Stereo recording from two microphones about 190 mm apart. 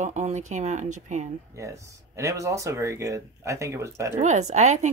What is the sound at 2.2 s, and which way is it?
Speech, 15° right (ahead or behind).